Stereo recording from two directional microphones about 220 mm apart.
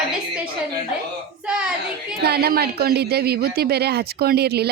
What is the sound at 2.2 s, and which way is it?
Speech, 45° right (ahead or behind).